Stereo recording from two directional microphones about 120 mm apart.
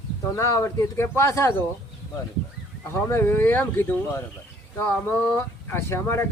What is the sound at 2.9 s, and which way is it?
Speech, 20° left (ahead or behind).